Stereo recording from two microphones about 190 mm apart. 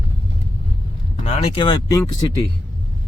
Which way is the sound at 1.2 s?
30° left (ahead or behind).